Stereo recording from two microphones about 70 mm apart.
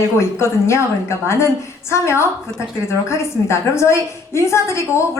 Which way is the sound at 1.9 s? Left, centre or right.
Left.